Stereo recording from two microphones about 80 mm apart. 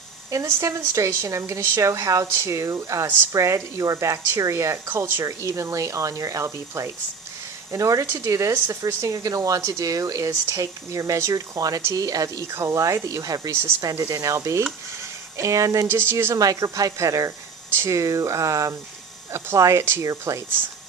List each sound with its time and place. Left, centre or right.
0.3 s speech: right
4.9 s a woman's voice: right
5.2 s speech: right
13.5 s speech: right
16.3 s speech: right